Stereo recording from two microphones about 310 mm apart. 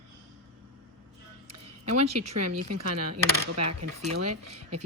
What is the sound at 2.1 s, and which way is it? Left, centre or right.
Speech, right.